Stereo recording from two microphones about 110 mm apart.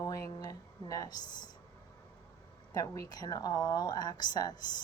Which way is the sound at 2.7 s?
30° left (ahead or behind).